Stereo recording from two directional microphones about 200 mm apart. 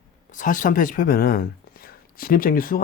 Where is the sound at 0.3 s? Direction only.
40° left (ahead or behind).